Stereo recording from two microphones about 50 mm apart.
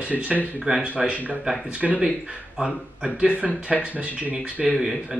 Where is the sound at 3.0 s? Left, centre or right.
Right.